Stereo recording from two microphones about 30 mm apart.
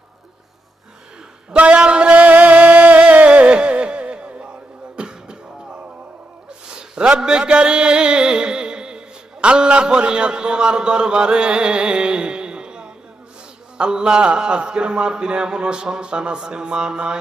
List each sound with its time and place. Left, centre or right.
1.5 s music: right
4.9 s beatboxing: right
6.7 s a sound: right
7.2 s music: right
13.7 s speech: right